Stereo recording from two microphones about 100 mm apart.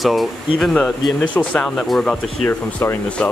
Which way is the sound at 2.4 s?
25° left (ahead or behind).